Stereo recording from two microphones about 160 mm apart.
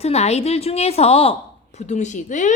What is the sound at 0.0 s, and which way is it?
A woman's voice, 40° left (ahead or behind).